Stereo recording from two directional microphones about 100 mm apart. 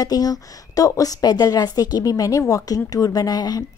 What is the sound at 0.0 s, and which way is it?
A woman's voice, 40° left (ahead or behind).